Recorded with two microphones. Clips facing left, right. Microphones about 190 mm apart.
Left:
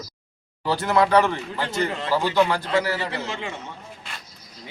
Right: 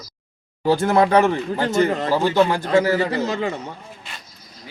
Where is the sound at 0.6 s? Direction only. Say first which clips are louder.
Right 4 dB; 50° right (ahead or behind).